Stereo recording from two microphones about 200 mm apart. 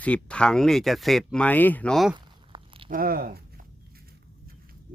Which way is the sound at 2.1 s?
25° right (ahead or behind).